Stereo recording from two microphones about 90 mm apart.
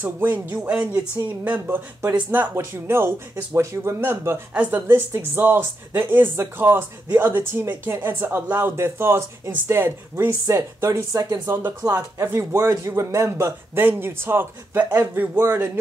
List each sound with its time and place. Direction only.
0.0 s speech: 20° right (ahead or behind); by 11.4 s 45° right (ahead or behind)
11.4 s speech: 30° right (ahead or behind)